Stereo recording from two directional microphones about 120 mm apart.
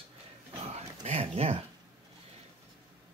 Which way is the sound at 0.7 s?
65° right (ahead or behind).